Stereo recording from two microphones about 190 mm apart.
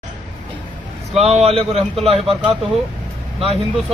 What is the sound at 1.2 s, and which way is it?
Speech, 35° right (ahead or behind).